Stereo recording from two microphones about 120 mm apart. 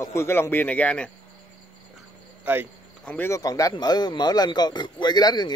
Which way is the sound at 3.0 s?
15° left (ahead or behind).